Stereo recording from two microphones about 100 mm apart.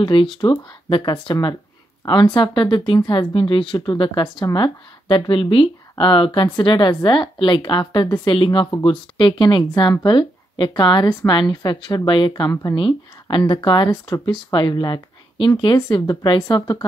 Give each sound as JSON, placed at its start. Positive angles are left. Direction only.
{"t": 0.0, "sound": "speech", "side_deg": 50}
{"t": 8.3, "sound": "speech", "side_deg": 60}